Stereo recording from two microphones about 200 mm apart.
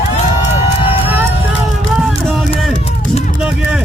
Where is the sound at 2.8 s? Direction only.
30° left (ahead or behind).